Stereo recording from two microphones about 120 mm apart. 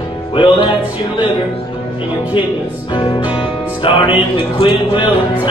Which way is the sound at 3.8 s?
45° left (ahead or behind).